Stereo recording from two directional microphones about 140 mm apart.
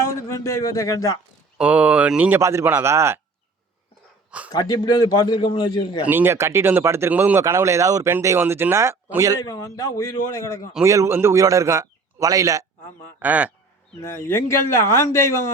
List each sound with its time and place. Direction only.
0.1 s speech: 20° left (ahead or behind)
1.5 s speech: 10° right (ahead or behind)
2.4 s speech: 20° right (ahead or behind)
4.5 s a man's voice: 30° left (ahead or behind)
6.1 s speech: 15° right (ahead or behind)
9.4 s a man's voice: 25° left (ahead or behind)
10.8 s speech: 20° right (ahead or behind)
13.1 s speech: 10° right (ahead or behind)
14.0 s a man's voice: 20° left (ahead or behind)